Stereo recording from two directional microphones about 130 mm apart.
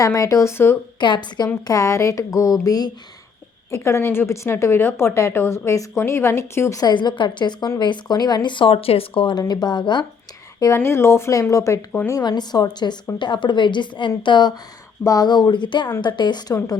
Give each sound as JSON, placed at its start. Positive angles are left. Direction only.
{"t": 0.0, "sound": "a woman's voice", "side_deg": 25}
{"t": 0.9, "sound": "a woman's voice", "side_deg": 35}
{"t": 1.6, "sound": "a woman's voice", "side_deg": 25}
{"t": 10.8, "sound": "a woman's voice", "side_deg": 20}
{"t": 11.9, "sound": "speech", "side_deg": 10}
{"t": 12.1, "sound": "a woman's voice", "side_deg": 30}